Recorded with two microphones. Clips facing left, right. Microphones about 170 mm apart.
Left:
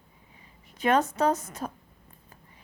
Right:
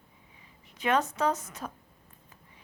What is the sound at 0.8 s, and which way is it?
Speech, 40° left (ahead or behind).